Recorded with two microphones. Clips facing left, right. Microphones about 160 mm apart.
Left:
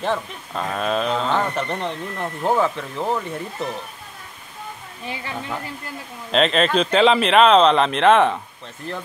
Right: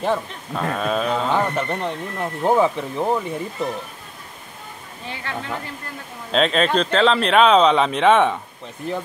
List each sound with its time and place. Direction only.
0.0 s speech: 10° right (ahead or behind)
5.2 s speech: 15° left (ahead or behind)
6.3 s speech: centre (ahead or behind)